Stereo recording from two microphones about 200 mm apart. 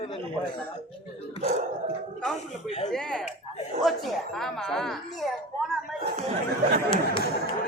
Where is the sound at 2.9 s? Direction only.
5° left (ahead or behind).